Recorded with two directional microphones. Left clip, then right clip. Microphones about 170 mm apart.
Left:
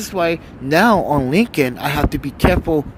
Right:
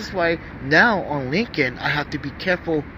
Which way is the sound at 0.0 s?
65° left (ahead or behind).